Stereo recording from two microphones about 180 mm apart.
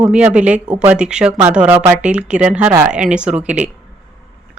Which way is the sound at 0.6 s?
25° right (ahead or behind).